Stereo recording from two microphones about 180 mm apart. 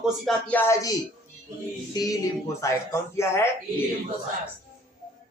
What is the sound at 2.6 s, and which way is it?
Speech, 15° left (ahead or behind).